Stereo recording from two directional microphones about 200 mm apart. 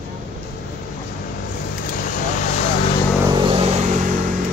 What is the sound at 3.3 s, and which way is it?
Vehicle, 30° right (ahead or behind).